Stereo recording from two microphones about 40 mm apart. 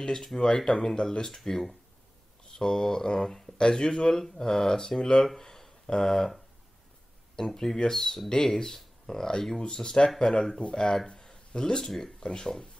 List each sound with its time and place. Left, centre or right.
0.0 s speech: centre
2.6 s speech: centre